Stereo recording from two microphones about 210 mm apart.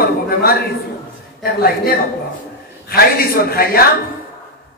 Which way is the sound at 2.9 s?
45° left (ahead or behind).